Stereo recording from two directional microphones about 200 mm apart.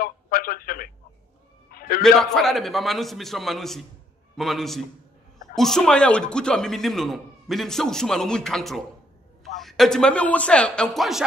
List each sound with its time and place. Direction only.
0.0 s telephone: 45° left (ahead or behind)
1.7 s a sound: 45° left (ahead or behind)
2.0 s a man's voice: 5° left (ahead or behind)